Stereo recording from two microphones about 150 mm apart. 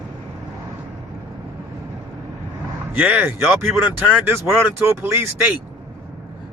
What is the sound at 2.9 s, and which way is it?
Speech, 10° right (ahead or behind).